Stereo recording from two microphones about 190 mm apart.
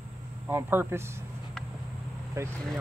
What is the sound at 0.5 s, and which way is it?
Speech, 10° right (ahead or behind).